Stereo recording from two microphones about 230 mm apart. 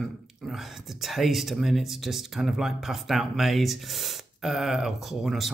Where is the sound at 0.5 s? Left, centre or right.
Centre.